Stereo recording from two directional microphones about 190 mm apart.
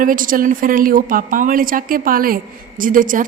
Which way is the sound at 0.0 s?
45° right (ahead or behind).